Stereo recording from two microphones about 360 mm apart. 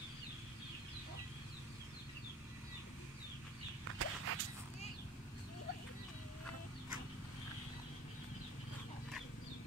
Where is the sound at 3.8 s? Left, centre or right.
Right.